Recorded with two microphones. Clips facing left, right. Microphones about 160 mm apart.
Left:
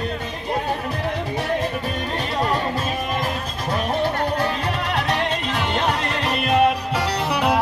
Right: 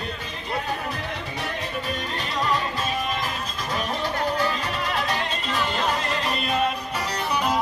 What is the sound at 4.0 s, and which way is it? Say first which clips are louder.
Music: left 2 dB; 60° left (ahead or behind).